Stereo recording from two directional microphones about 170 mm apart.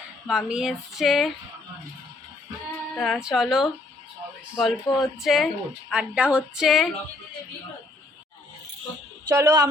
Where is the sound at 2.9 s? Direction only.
Centre (ahead or behind).